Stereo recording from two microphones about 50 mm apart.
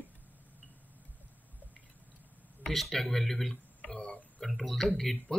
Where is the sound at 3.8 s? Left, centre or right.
Centre.